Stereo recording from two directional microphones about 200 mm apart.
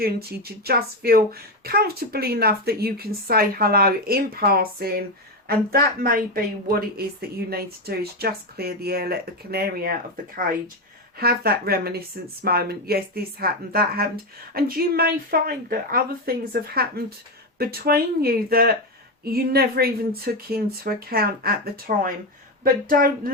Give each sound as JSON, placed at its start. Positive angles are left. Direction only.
{"t": 0.0, "sound": "speech", "side_deg": -50}